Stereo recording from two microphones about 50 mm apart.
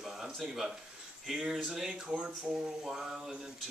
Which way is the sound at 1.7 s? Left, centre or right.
Centre.